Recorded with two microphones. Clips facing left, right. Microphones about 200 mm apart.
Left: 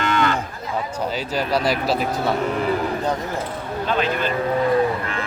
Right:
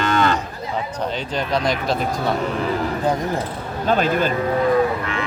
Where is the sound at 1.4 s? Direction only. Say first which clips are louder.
Left 1 dB; 5° left (ahead or behind).